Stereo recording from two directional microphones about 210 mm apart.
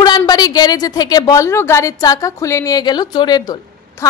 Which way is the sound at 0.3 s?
20° left (ahead or behind).